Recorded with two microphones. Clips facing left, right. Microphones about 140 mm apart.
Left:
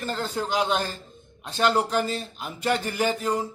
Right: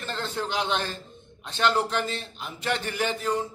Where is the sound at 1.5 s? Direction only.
10° left (ahead or behind).